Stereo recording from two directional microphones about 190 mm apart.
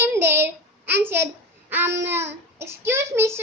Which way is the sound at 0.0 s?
10° right (ahead or behind).